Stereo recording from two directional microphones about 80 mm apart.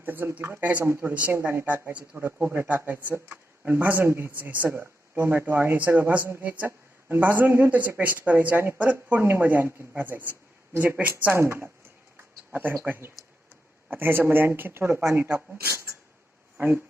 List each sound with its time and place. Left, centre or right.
0.0 s speech: right
1.3 s a woman's voice: right
1.6 s speech: centre
16.6 s speech: right